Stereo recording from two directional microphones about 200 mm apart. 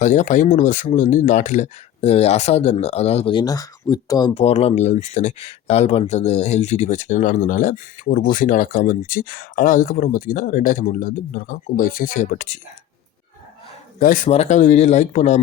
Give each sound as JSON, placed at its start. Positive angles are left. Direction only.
{"t": 0.0, "sound": "speech", "side_deg": 40}
{"t": 4.4, "sound": "speech", "side_deg": 30}
{"t": 14.0, "sound": "speech", "side_deg": 45}